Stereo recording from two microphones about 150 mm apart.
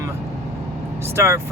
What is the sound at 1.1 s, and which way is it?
Speech, 15° right (ahead or behind).